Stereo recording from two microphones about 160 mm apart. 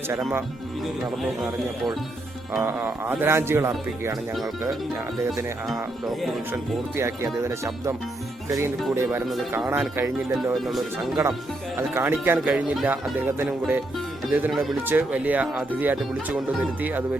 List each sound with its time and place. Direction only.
1.2 s speech: centre (ahead or behind); by 3.7 s 15° right (ahead or behind)
5.6 s speech: centre (ahead or behind)
6.5 s speech: 15° right (ahead or behind)
10.5 s speech: centre (ahead or behind)
11.8 s speech: 15° right (ahead or behind)